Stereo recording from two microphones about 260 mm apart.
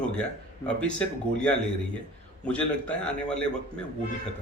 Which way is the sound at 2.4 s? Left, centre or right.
Centre.